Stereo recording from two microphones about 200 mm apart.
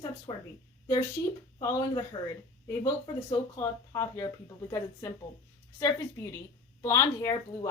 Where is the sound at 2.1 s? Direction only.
25° left (ahead or behind).